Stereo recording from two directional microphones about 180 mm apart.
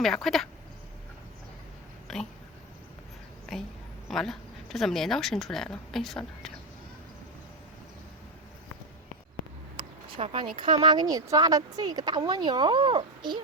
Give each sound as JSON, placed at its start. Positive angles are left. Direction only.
{"t": 0.0, "sound": "speech", "side_deg": 0}
{"t": 2.1, "sound": "speech", "side_deg": 0}
{"t": 3.5, "sound": "a sound", "side_deg": 0}
{"t": 4.1, "sound": "speech", "side_deg": 0}
{"t": 9.7, "sound": "speech", "side_deg": -30}